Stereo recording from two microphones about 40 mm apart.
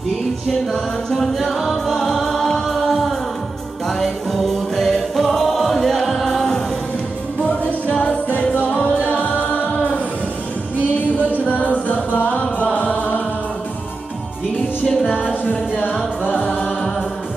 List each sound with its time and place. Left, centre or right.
1.1 s a capella: centre
2.0 s music: centre
8.0 s music: left
9.7 s music: left
11.1 s music: left
12.7 s chant: left
15.0 s music: centre
16.4 s music: left